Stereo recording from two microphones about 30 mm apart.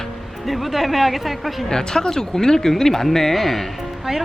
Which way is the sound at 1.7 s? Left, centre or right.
Left.